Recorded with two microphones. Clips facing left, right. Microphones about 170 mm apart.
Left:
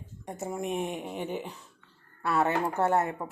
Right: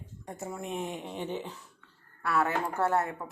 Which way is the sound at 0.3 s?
20° left (ahead or behind).